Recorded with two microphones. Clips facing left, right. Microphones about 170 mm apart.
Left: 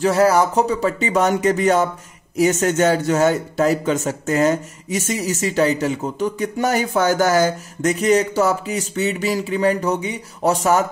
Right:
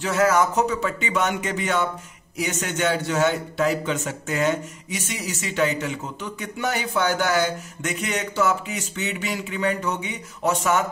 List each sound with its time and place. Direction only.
0.0 s a man's voice: 35° left (ahead or behind)